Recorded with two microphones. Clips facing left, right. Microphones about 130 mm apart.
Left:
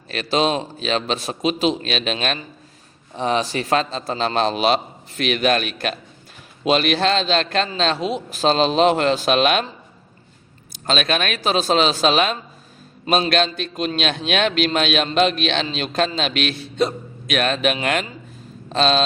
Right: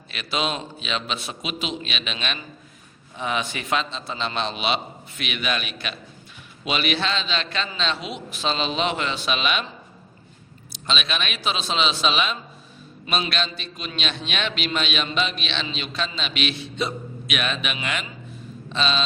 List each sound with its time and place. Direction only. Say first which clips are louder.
0.1 s a man's voice: left 7 dB; 40° left (ahead or behind)
10.7 s a man's voice: left 7 dB; 45° left (ahead or behind)